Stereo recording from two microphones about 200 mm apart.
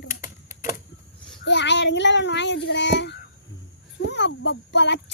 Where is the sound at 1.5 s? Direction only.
60° left (ahead or behind).